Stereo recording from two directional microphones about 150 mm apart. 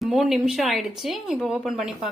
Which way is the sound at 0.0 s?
Centre (ahead or behind).